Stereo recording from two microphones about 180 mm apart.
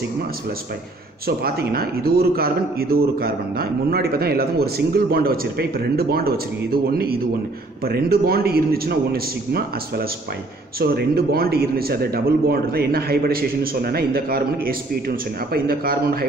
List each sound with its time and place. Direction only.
1.2 s a man's voice: 55° right (ahead or behind)